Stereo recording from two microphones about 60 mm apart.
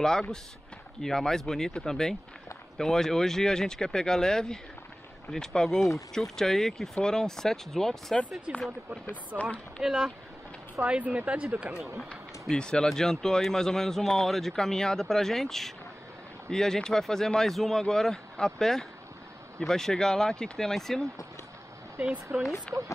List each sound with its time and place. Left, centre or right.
0.0 s speech: centre
9.3 s speech: right
9.8 s speech: centre
10.8 s speech: right
12.1 s speech: centre
22.0 s speech: right